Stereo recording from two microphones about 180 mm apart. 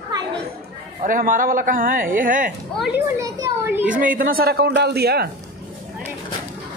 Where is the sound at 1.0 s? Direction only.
50° right (ahead or behind).